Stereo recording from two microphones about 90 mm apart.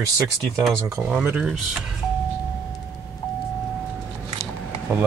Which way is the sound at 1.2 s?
10° right (ahead or behind).